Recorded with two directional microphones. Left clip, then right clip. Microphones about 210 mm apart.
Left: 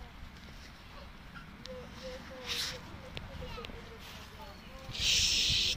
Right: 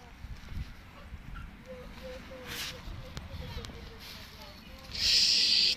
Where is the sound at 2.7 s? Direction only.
45° right (ahead or behind).